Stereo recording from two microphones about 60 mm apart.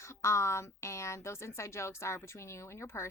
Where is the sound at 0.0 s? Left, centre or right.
Left.